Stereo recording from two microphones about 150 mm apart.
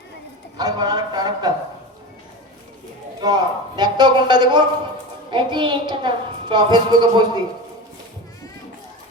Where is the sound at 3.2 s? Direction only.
25° right (ahead or behind).